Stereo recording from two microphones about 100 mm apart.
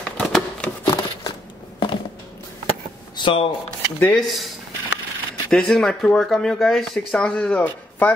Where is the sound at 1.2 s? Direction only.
55° left (ahead or behind).